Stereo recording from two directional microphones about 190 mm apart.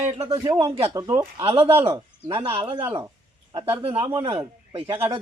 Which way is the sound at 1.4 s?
25° right (ahead or behind).